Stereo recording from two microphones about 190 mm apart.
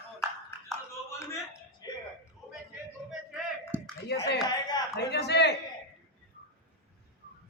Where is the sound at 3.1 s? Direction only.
Centre (ahead or behind).